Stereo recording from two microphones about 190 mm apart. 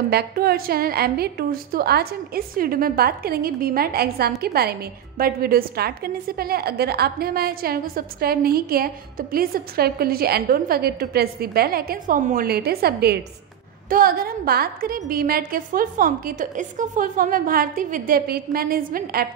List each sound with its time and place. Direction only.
0.1 s a woman's voice: 55° right (ahead or behind)